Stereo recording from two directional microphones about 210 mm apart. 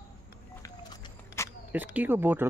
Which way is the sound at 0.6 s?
20° left (ahead or behind).